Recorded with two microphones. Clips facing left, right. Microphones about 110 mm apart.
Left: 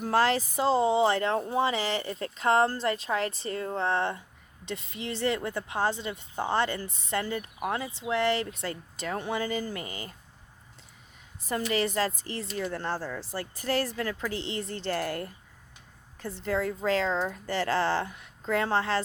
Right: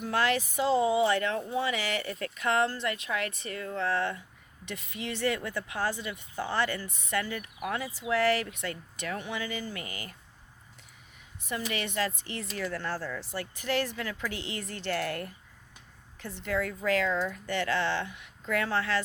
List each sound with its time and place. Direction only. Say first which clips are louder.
0.0 s speech: left 3 dB; 35° left (ahead or behind)
9.8 s speech: left 2 dB; 25° left (ahead or behind)
11.7 s speech: left 5 dB; 35° left (ahead or behind)